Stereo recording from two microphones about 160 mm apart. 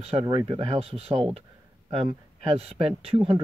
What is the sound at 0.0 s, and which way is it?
Speech, 35° right (ahead or behind).